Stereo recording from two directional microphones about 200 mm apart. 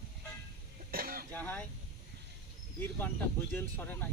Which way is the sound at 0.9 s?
45° right (ahead or behind).